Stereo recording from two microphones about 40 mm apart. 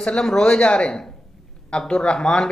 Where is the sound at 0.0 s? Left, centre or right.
Centre.